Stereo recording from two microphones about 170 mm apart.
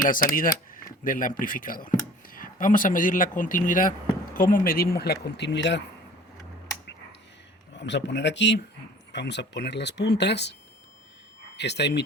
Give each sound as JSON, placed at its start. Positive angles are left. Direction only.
{"t": 0.0, "sound": "speech", "side_deg": 55}
{"t": 7.8, "sound": "speech", "side_deg": 90}
{"t": 11.5, "sound": "speech", "side_deg": 85}